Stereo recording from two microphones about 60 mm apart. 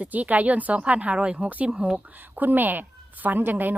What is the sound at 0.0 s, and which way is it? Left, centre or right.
Speech, right.